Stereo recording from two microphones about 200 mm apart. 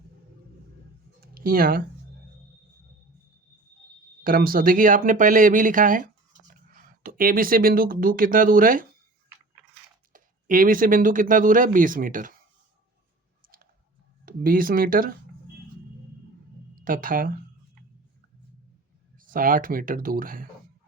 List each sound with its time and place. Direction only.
1.2 s a sound: 50° right (ahead or behind)
4.2 s speech: 45° right (ahead or behind)
10.1 s speech: 45° right (ahead or behind)
14.3 s speech: 45° right (ahead or behind)
16.8 s speech: 45° right (ahead or behind)
19.1 s speech: 45° right (ahead or behind)